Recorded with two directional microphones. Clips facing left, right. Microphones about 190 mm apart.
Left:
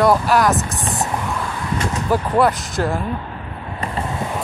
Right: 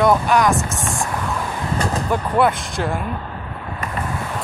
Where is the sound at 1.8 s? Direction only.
35° right (ahead or behind).